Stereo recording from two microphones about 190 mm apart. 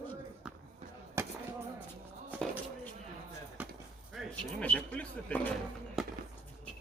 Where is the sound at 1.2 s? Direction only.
15° right (ahead or behind).